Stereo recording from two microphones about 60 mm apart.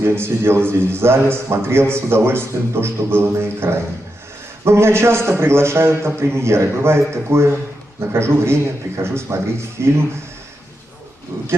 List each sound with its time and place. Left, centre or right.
0.0 s a man's voice: right
11.3 s a man's voice: right